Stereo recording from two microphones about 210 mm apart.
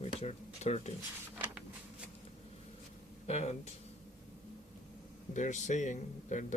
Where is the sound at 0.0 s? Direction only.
30° left (ahead or behind).